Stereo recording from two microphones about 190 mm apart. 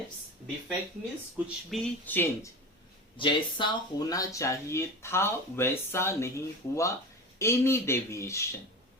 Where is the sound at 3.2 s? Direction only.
25° left (ahead or behind).